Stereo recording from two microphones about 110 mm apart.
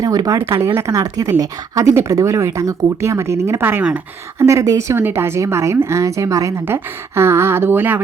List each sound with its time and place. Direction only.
0.0 s speech: 35° right (ahead or behind)